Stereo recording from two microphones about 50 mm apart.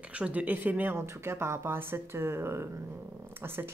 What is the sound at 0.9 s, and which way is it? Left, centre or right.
Speech, right.